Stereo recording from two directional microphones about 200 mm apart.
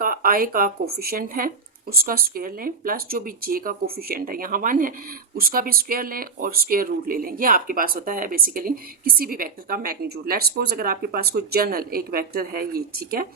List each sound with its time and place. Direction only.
0.0 s speech: 45° right (ahead or behind)